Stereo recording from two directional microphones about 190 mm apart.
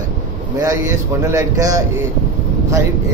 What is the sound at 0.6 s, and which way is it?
Speech, 15° right (ahead or behind).